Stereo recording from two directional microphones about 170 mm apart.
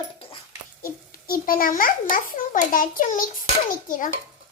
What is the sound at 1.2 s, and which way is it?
A child's voice, 60° left (ahead or behind).